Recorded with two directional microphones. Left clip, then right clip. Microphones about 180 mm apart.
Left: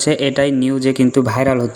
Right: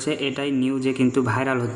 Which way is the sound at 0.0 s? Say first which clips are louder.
Left 10 dB; 40° left (ahead or behind).